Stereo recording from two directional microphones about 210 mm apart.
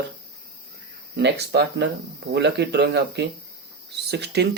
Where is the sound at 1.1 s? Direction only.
50° right (ahead or behind).